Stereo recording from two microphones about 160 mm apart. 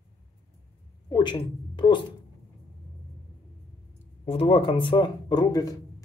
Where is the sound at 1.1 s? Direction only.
30° left (ahead or behind).